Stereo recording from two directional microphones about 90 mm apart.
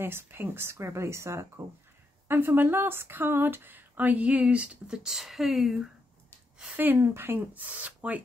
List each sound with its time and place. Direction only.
0.0 s speech: 25° right (ahead or behind); by 5.8 s centre (ahead or behind)
6.8 s speech: 25° right (ahead or behind)